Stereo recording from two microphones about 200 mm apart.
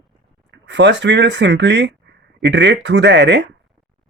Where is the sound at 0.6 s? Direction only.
65° right (ahead or behind).